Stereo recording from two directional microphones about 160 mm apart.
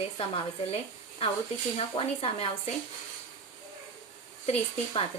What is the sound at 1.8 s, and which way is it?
Speech, 35° left (ahead or behind).